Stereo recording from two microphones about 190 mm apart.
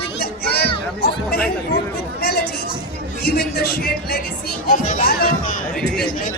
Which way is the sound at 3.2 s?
55° left (ahead or behind).